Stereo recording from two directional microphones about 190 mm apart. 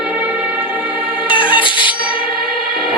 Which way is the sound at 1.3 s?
25° left (ahead or behind).